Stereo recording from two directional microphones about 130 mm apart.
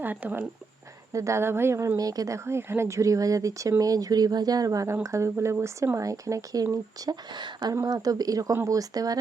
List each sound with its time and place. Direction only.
0.0 s speech: 15° right (ahead or behind); by 9.1 s 30° right (ahead or behind)